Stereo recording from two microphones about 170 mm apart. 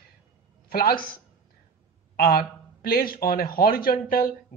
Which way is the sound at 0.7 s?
60° left (ahead or behind).